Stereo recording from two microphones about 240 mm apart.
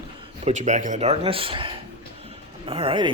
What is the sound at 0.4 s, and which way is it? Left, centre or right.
Speech, right.